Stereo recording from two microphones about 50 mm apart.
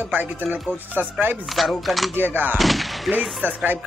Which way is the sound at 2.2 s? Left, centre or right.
Right.